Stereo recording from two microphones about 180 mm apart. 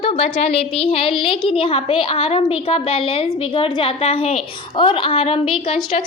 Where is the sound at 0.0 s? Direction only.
35° left (ahead or behind).